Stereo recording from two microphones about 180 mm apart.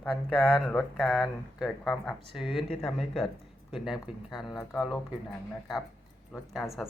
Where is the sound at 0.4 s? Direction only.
5° left (ahead or behind).